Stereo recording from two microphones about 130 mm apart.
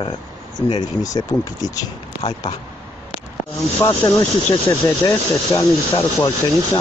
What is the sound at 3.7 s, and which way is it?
Speech, 20° left (ahead or behind).